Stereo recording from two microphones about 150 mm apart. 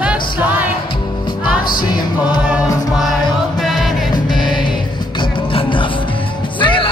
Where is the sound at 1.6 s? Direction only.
70° left (ahead or behind).